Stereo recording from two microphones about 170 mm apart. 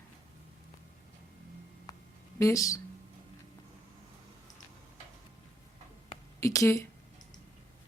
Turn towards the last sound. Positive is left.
turn(degrees=20)  # may be behind; listen again after turning